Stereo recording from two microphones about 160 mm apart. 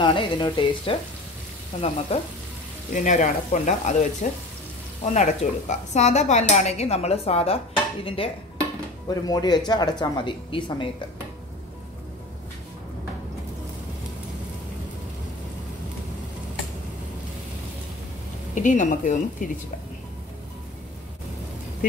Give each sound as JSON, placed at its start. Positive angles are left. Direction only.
{"t": 0.0, "sound": "speech", "side_deg": 30}
{"t": 1.7, "sound": "speech", "side_deg": 50}
{"t": 2.1, "sound": "speech", "side_deg": 40}
{"t": 2.9, "sound": "speech", "side_deg": 50}
{"t": 9.0, "sound": "a woman's voice", "side_deg": 25}
{"t": 18.5, "sound": "speech", "side_deg": 50}